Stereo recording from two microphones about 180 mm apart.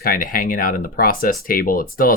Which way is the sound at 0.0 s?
50° left (ahead or behind).